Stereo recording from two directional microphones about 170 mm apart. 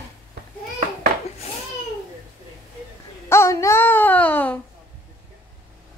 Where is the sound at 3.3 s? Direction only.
15° left (ahead or behind).